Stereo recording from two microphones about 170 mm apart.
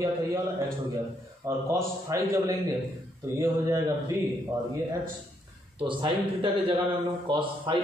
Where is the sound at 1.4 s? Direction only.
15° right (ahead or behind).